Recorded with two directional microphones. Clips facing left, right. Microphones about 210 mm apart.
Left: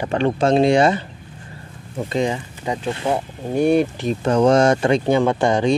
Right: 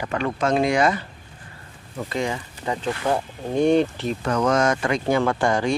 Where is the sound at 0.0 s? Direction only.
30° left (ahead or behind).